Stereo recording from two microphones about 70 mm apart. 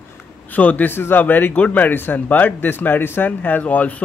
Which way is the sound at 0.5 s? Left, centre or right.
Left.